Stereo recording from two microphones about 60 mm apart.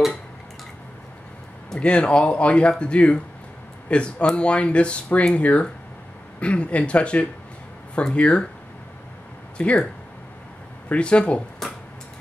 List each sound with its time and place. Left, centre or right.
1.7 s speech: centre
9.6 s speech: centre
10.9 s speech: centre